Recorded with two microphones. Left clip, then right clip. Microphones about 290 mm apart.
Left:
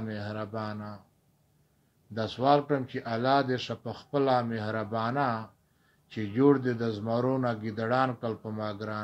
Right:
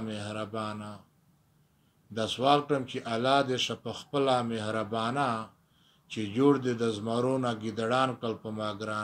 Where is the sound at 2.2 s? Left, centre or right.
Centre.